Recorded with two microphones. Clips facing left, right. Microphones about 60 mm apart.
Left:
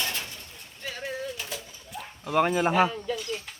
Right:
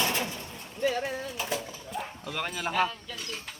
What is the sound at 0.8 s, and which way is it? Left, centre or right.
Speech, centre.